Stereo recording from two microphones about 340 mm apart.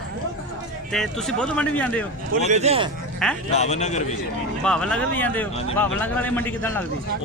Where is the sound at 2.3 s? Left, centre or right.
Right.